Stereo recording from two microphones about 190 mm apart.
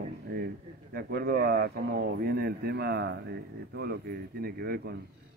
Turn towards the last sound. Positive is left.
turn(degrees=-55)  # may be behind; listen again after turning